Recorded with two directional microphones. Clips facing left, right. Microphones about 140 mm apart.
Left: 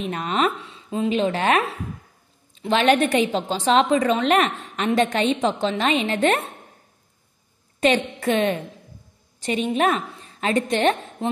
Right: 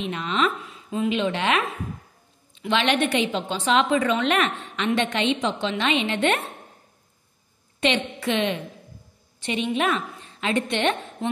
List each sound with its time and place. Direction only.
0.0 s a woman's voice: 45° left (ahead or behind)
0.6 s a woman's voice: 30° left (ahead or behind)
7.8 s a woman's voice: 45° left (ahead or behind)